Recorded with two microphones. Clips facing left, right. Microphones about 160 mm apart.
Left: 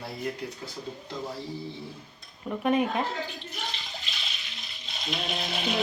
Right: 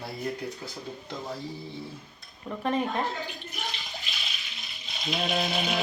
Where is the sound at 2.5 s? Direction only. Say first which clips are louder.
Left 3 dB; 10° left (ahead or behind).